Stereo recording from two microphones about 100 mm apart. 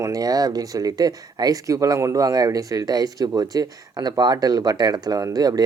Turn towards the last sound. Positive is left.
turn(degrees=-40)  # may be behind; listen again after turning